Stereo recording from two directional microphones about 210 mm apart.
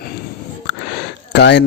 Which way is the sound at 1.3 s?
55° left (ahead or behind).